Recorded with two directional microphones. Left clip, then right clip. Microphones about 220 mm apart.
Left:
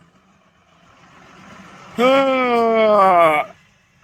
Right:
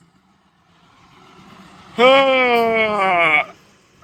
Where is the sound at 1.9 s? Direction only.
10° left (ahead or behind).